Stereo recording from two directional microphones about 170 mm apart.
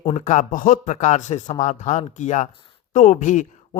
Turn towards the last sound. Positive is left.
turn(degrees=45)  # may be behind; listen again after turning